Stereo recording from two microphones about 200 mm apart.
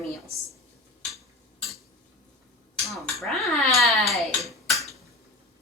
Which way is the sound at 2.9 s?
Centre (ahead or behind).